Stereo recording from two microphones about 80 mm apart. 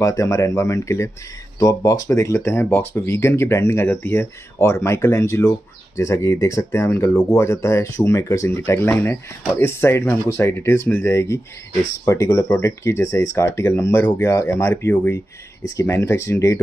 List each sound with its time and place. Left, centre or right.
0.0 s speech: left